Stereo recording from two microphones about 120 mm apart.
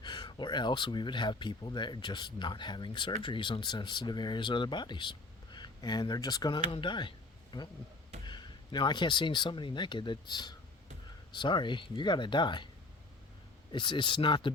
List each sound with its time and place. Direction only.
0.0 s speech: 40° left (ahead or behind)
13.7 s speech: 40° left (ahead or behind)